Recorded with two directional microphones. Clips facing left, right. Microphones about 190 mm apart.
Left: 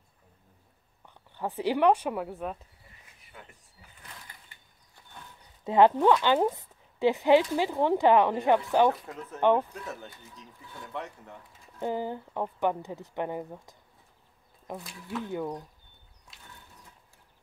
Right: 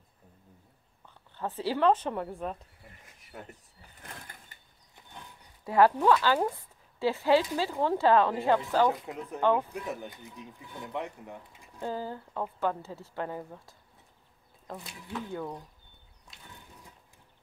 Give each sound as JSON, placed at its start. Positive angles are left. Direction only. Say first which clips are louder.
{"t": 1.0, "sound": "a woman's voice", "louder": "left 2 dB", "side_deg": 15}
{"t": 2.8, "sound": "a sound", "louder": "right 4 dB", "side_deg": -45}
{"t": 4.0, "sound": "sewing machine", "louder": "right 3 dB", "side_deg": -50}
{"t": 5.6, "sound": "speech", "louder": "left 2 dB", "side_deg": 20}
{"t": 8.9, "sound": "speech", "louder": "right 3 dB", "side_deg": -15}
{"t": 9.4, "sound": "speech", "louder": "left 3 dB", "side_deg": 20}
{"t": 9.7, "sound": "speech", "louder": "right 4 dB", "side_deg": -15}
{"t": 11.8, "sound": "speech", "louder": "left 4 dB", "side_deg": 20}
{"t": 15.2, "sound": "speech", "louder": "left 5 dB", "side_deg": 15}